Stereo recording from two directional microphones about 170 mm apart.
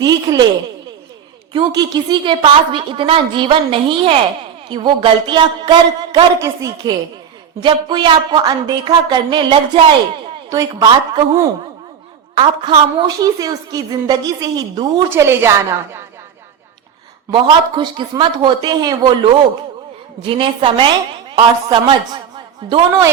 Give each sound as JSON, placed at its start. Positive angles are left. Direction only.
{"t": 0.0, "sound": "a woman's voice", "side_deg": -25}
{"t": 1.5, "sound": "a woman's voice", "side_deg": -25}
{"t": 17.3, "sound": "a woman's voice", "side_deg": -30}